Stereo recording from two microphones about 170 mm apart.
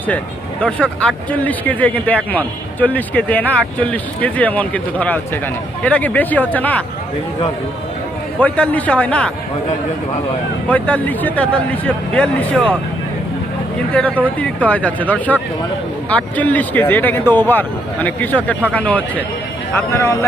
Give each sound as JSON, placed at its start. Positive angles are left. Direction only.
{"t": 0.6, "sound": "speech", "side_deg": 5}
{"t": 8.4, "sound": "speech", "side_deg": 10}
{"t": 10.7, "sound": "speech", "side_deg": 10}
{"t": 14.0, "sound": "speech", "side_deg": 5}